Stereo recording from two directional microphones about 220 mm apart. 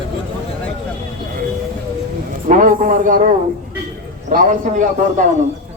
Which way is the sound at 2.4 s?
35° right (ahead or behind).